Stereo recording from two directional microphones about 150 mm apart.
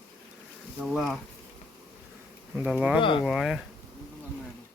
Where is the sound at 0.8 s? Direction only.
Centre (ahead or behind).